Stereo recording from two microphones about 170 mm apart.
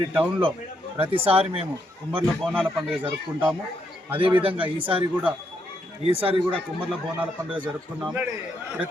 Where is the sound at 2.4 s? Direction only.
5° left (ahead or behind).